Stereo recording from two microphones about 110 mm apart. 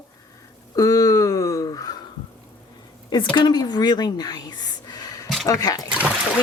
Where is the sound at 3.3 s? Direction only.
40° left (ahead or behind).